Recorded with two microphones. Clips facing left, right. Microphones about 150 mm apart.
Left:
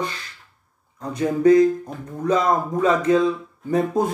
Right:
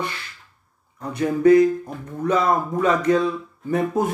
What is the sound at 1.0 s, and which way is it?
Speech, 10° left (ahead or behind).